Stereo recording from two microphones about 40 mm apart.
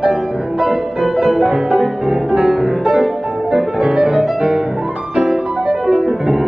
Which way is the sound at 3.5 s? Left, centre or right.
Centre.